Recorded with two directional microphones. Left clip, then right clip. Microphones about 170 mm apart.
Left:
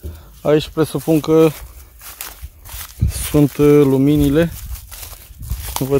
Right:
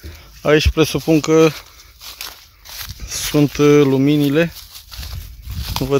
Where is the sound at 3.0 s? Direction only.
10° left (ahead or behind).